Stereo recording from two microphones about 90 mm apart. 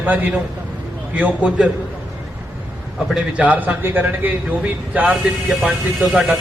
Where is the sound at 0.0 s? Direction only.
20° right (ahead or behind).